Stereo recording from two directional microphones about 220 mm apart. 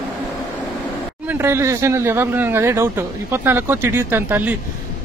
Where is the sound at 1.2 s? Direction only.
10° right (ahead or behind).